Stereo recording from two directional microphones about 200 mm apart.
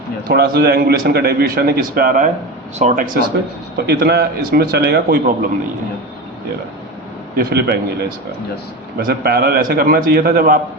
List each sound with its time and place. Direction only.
0.3 s a man's voice: 50° right (ahead or behind)
7.3 s a man's voice: 50° right (ahead or behind)
9.0 s a man's voice: 50° right (ahead or behind)